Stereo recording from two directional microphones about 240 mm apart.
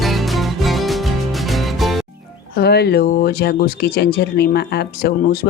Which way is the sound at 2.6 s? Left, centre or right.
Left.